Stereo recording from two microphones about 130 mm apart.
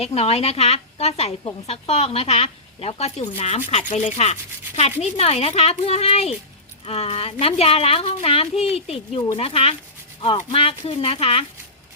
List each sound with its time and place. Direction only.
0.0 s speech: 50° left (ahead or behind)